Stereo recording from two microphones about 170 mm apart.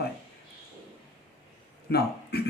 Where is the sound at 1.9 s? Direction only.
70° left (ahead or behind).